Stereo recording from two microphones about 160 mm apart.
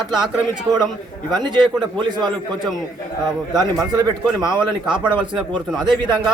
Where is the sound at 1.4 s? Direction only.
30° right (ahead or behind).